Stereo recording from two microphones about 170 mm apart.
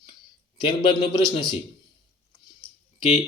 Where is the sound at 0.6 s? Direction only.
30° left (ahead or behind).